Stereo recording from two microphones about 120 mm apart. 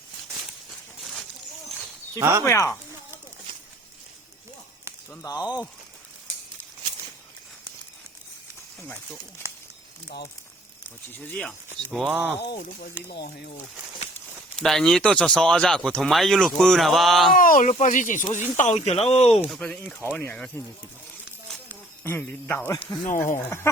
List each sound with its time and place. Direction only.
2.4 s speech: 20° left (ahead or behind)
5.2 s speech: 30° left (ahead or behind)
10.8 s speech: 10° left (ahead or behind)
11.9 s speech: 5° right (ahead or behind)
13.0 s speech: 15° left (ahead or behind)
14.6 s speech: 5° left (ahead or behind)
17.5 s speech: 85° left; by 19.4 s 55° left (ahead or behind)
19.5 s speech: 5° left (ahead or behind)
20.0 s speech: 15° left (ahead or behind)
22.0 s speech: 20° left (ahead or behind)
23.0 s speech: 90° left